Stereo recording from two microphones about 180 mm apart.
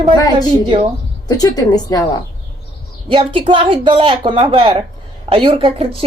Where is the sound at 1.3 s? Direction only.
20° left (ahead or behind).